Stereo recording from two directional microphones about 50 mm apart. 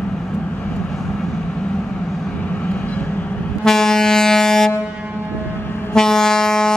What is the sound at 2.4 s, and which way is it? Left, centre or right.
Vehicle, left.